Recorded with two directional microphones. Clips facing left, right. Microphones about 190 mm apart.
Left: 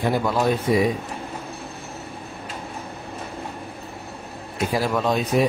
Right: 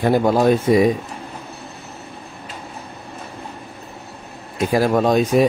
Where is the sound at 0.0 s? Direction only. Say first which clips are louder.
Right 6 dB; 45° right (ahead or behind).